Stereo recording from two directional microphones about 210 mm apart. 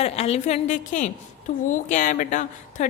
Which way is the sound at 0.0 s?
30° left (ahead or behind).